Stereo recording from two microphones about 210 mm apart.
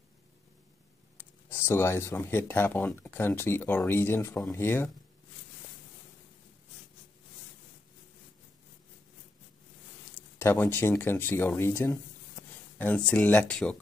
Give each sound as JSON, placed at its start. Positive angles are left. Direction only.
{"t": 1.1, "sound": "speech", "side_deg": 10}
{"t": 10.4, "sound": "speech", "side_deg": 10}
{"t": 12.4, "sound": "a sound", "side_deg": 35}
{"t": 12.7, "sound": "speech", "side_deg": 5}